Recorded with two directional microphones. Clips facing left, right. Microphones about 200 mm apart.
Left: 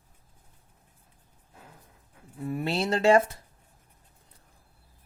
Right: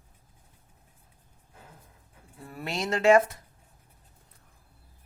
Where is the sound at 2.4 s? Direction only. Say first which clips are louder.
Left 5 dB; 25° left (ahead or behind).